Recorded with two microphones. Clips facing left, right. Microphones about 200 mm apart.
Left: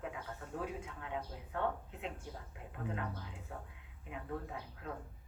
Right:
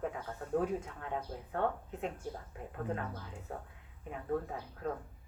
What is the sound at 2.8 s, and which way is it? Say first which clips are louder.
A woman's voice: right 2 dB; 45° right (ahead or behind).